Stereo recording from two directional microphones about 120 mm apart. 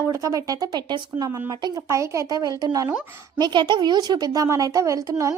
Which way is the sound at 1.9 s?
25° right (ahead or behind).